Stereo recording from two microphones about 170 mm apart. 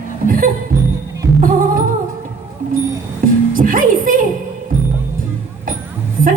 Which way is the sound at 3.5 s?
55° right (ahead or behind).